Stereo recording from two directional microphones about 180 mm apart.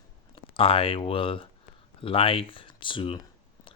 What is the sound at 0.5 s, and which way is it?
Speech, 30° left (ahead or behind).